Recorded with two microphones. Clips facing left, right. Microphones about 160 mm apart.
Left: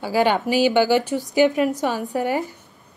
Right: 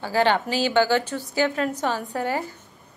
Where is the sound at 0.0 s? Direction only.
10° left (ahead or behind).